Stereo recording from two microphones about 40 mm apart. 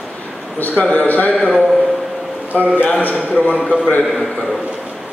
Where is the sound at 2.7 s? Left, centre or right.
Left.